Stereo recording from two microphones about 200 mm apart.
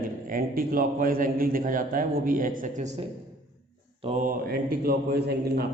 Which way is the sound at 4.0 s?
30° right (ahead or behind).